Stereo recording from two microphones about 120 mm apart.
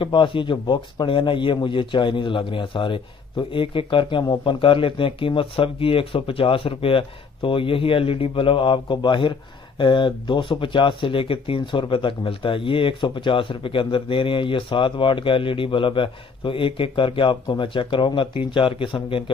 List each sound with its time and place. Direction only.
0.0 s speech: 45° left (ahead or behind)